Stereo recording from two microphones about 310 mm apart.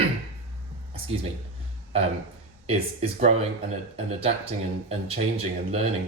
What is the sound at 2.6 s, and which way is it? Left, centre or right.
Speech, centre.